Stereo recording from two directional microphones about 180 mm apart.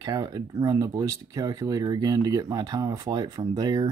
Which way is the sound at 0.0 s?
20° right (ahead or behind).